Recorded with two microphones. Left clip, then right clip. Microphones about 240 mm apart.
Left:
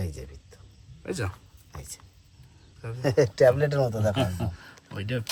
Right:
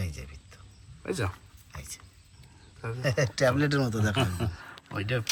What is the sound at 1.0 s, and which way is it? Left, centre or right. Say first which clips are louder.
Speech: right 1 dB; centre.